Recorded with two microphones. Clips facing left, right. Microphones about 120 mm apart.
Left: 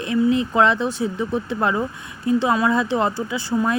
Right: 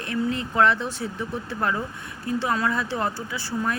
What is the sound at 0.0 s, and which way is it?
Speech, 15° left (ahead or behind).